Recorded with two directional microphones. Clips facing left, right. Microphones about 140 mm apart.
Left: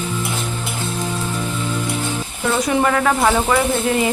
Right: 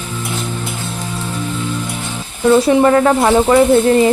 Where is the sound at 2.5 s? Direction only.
30° right (ahead or behind).